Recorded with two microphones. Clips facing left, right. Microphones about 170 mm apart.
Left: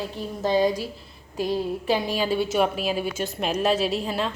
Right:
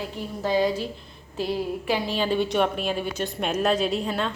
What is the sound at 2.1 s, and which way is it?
A woman's voice, 10° left (ahead or behind).